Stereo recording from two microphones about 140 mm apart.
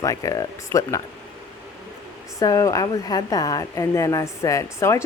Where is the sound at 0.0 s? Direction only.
25° left (ahead or behind).